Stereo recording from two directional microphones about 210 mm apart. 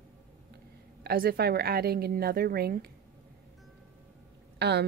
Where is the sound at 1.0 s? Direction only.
45° right (ahead or behind).